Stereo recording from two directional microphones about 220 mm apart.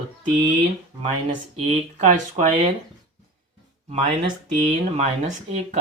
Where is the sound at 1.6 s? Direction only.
30° right (ahead or behind).